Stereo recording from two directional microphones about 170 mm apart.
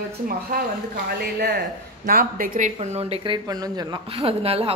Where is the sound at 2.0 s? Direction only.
55° right (ahead or behind).